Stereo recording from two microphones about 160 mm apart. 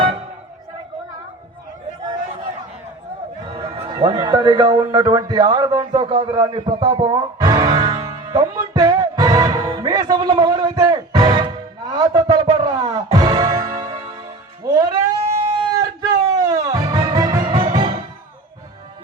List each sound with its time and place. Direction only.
3.4 s music: 30° right (ahead or behind)
3.9 s a man's voice: 25° right (ahead or behind)
5.9 s music: 35° right (ahead or behind)